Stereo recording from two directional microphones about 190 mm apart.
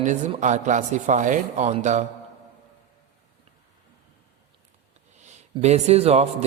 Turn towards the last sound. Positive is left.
turn(degrees=-35)  # may be behind; listen again after turning